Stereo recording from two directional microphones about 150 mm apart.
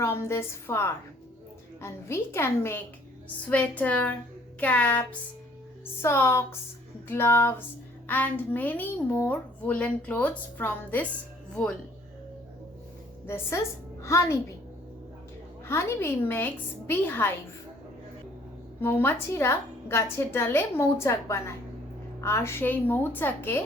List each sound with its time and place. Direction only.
0.0 s a woman's voice: 15° left (ahead or behind)
13.2 s a woman's voice: 15° left (ahead or behind)
15.6 s a woman's voice: 15° left (ahead or behind)
18.8 s a woman's voice: 15° left (ahead or behind)